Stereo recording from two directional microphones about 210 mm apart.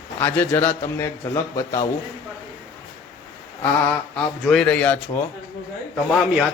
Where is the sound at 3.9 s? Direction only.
5° left (ahead or behind).